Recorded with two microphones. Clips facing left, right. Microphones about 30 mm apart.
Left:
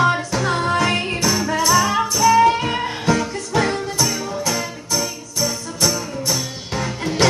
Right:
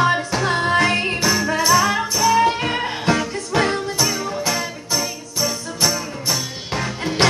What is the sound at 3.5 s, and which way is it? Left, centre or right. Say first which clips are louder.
Music: right 1 dB; right.